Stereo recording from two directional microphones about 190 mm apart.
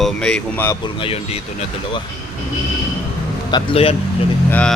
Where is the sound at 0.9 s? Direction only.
30° left (ahead or behind).